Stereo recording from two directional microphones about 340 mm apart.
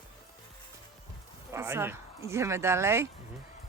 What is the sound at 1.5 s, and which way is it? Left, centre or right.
Speech, centre.